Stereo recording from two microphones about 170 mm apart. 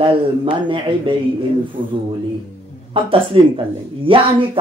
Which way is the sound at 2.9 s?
30° right (ahead or behind).